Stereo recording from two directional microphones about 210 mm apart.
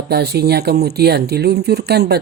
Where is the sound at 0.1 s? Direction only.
50° right (ahead or behind).